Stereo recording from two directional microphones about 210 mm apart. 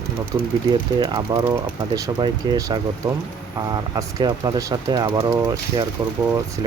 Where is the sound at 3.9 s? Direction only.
20° right (ahead or behind).